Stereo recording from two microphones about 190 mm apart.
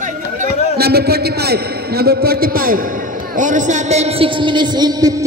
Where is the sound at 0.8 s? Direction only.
55° right (ahead or behind).